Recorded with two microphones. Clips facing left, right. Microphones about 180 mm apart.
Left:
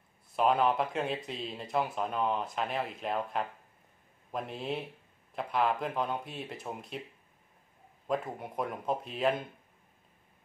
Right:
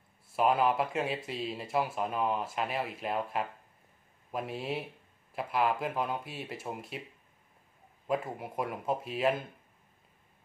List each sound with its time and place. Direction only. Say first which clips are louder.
0.4 s speech: even; 5° right (ahead or behind)
8.1 s speech: right 1 dB; 5° right (ahead or behind)